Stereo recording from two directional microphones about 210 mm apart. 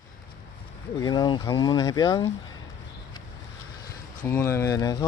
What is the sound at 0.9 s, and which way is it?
Speech, 20° left (ahead or behind).